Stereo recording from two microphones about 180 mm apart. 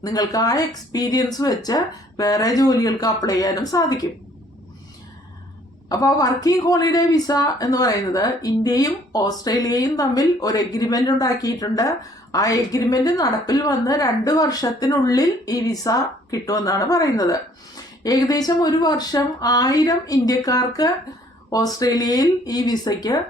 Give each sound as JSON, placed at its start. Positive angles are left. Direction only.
{"t": 0.0, "sound": "a woman's voice", "side_deg": 20}
{"t": 5.9, "sound": "a woman's voice", "side_deg": 20}